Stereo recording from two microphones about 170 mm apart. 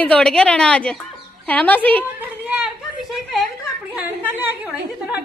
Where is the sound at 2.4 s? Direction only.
5° right (ahead or behind).